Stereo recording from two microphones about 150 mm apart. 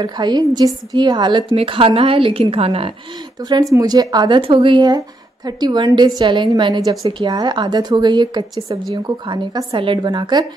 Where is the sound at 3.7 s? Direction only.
25° right (ahead or behind).